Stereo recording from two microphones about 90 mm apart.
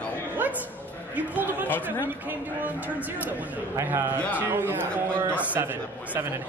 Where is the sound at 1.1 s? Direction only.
20° right (ahead or behind).